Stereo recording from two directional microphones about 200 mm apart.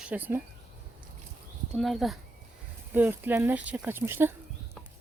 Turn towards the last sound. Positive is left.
turn(degrees=5)  # may be behind; listen again after turning